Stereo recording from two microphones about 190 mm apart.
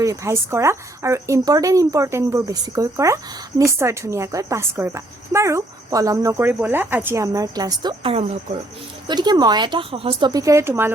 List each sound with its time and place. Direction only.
0.0 s a woman's voice: 15° right (ahead or behind)